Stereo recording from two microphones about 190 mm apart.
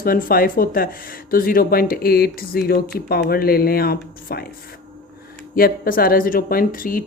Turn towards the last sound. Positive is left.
turn(degrees=50)  # may be behind; listen again after turning